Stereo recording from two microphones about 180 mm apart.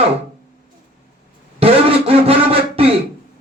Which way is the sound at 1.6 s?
35° right (ahead or behind).